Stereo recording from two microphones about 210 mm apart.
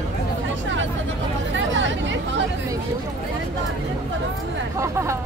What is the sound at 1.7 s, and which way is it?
Hubbub, 60° right (ahead or behind).